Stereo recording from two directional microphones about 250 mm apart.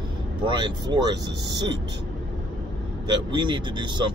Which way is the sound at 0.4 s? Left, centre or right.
Centre.